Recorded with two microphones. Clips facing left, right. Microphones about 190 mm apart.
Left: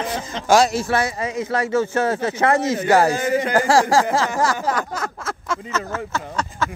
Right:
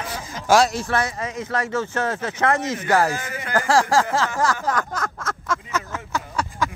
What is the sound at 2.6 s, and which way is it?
Speech, 35° left (ahead or behind).